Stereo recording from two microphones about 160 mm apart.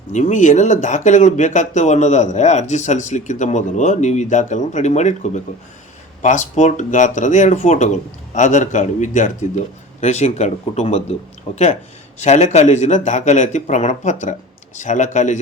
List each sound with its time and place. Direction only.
0.1 s speech: 50° left (ahead or behind)